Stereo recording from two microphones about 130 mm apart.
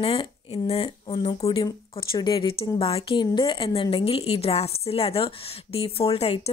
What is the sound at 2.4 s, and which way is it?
A woman's voice, 45° left (ahead or behind).